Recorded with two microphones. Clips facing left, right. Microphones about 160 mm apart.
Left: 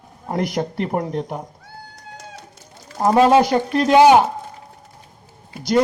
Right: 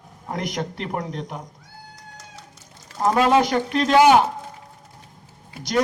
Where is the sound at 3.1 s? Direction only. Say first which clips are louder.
Left 4 dB; 30° left (ahead or behind).